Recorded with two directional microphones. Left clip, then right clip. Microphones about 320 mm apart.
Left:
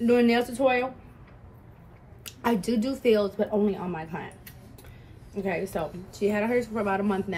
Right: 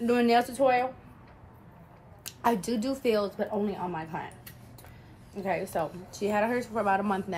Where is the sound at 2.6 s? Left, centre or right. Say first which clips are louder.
Left 3 dB; centre.